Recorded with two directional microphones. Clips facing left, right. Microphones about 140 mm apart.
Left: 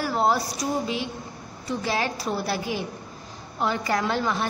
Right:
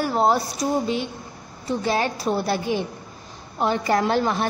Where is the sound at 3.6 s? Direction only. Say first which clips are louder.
Right 4 dB; 25° right (ahead or behind).